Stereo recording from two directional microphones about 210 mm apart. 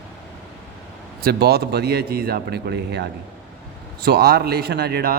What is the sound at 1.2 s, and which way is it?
Speech, 50° right (ahead or behind).